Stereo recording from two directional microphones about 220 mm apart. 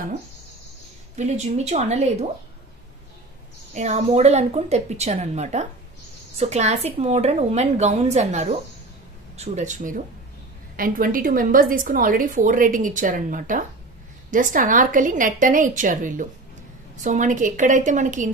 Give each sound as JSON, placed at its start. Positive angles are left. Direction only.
{"t": 1.1, "sound": "a woman's voice", "side_deg": -30}
{"t": 3.7, "sound": "a woman's voice", "side_deg": -30}